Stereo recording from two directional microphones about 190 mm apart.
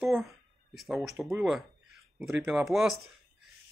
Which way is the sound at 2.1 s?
5° right (ahead or behind).